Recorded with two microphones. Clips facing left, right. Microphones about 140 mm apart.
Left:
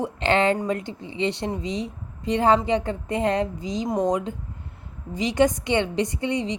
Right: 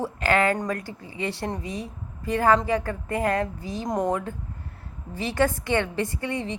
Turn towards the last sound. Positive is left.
turn(degrees=20)  # may be behind; listen again after turning